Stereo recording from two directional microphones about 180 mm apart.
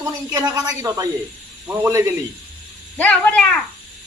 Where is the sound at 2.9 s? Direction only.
10° left (ahead or behind).